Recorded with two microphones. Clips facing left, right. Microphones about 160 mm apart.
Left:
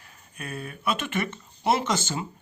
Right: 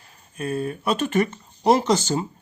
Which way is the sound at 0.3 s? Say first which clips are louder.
Right 10 dB; 35° right (ahead or behind).